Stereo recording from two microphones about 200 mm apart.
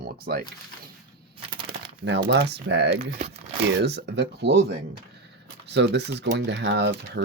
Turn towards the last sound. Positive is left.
turn(degrees=-60)  # may be behind; listen again after turning